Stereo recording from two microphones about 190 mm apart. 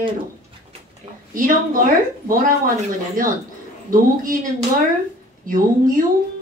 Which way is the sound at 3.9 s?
45° right (ahead or behind).